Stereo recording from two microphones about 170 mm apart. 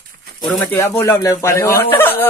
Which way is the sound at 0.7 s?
15° left (ahead or behind).